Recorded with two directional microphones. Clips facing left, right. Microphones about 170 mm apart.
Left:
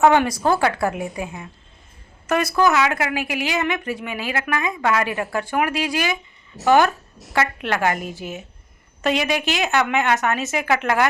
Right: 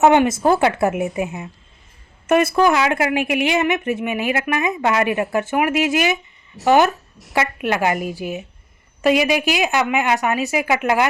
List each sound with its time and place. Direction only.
0.0 s a woman's voice: 20° right (ahead or behind)